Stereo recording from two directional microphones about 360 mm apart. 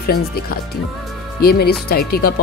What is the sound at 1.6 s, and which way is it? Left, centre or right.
Speech, left.